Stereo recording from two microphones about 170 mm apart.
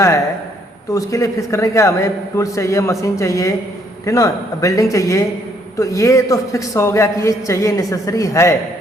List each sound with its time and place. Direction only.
0.9 s a man's voice: 20° left (ahead or behind)